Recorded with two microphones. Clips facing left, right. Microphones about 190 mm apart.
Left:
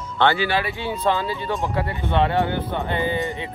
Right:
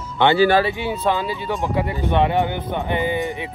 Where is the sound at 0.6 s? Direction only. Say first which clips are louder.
Right 2 dB; 15° right (ahead or behind).